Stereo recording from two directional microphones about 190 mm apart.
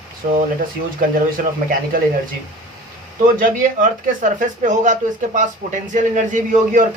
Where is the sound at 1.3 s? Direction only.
50° right (ahead or behind).